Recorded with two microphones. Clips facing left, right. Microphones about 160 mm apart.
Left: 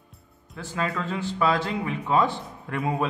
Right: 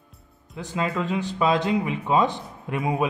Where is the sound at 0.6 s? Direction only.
20° right (ahead or behind).